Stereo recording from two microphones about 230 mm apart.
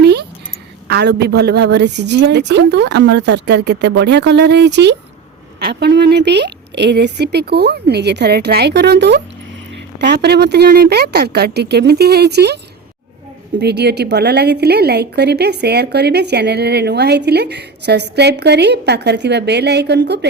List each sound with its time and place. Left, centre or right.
0.0 s a sound: right
0.9 s speech: right
13.6 s speech: right